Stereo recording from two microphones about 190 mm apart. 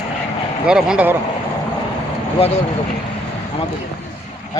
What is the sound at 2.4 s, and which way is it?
Speech, 30° left (ahead or behind).